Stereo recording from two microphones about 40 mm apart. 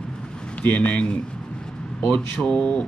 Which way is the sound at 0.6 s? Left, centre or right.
Left.